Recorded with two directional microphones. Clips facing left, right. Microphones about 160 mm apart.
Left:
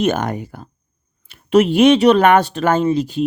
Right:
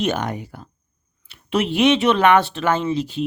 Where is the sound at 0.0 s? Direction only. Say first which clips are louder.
Left 4 dB; 45° left (ahead or behind).